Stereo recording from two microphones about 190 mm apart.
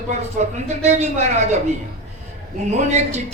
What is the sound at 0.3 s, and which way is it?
Speech, 35° right (ahead or behind).